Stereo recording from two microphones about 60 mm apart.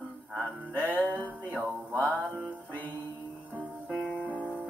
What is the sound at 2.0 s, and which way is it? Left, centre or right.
Music, left.